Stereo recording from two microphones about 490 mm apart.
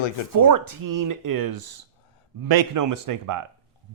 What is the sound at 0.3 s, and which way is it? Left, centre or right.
Speech, right.